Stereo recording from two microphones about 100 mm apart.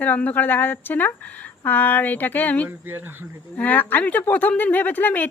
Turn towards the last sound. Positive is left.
turn(degrees=20)  # may be behind; listen again after turning